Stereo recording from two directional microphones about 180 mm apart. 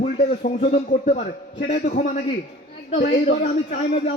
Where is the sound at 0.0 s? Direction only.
35° left (ahead or behind).